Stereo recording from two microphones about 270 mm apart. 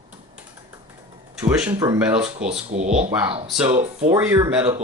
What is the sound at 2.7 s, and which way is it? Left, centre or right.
Speech, right.